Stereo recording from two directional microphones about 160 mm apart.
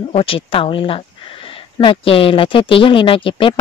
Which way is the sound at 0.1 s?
35° left (ahead or behind).